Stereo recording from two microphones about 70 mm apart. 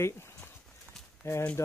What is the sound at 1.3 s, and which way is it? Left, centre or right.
Speech, left.